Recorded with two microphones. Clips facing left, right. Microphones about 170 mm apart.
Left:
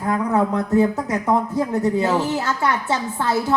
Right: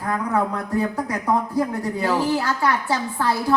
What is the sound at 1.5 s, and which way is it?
A woman's voice, 25° left (ahead or behind).